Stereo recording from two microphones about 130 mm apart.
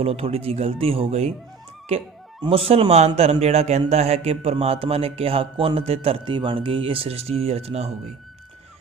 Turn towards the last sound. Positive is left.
turn(degrees=-55)  # may be behind; listen again after turning